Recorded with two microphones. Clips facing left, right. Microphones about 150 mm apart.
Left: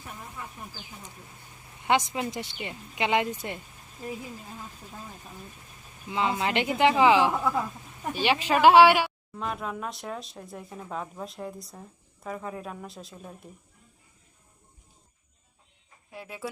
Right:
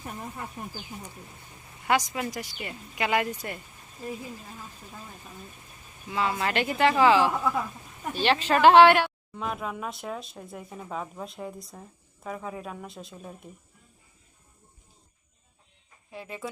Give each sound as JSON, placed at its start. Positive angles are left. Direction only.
{"t": 1.9, "sound": "a woman's voice", "side_deg": 25}
{"t": 6.1, "sound": "a woman's voice", "side_deg": 20}
{"t": 16.1, "sound": "speech", "side_deg": 5}